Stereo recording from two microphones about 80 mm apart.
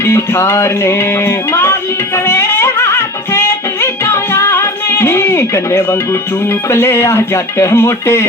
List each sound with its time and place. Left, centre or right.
0.0 s music: left
6.5 s speech: left